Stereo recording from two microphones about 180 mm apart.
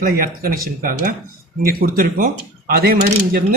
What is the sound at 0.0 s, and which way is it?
Speech, 50° right (ahead or behind).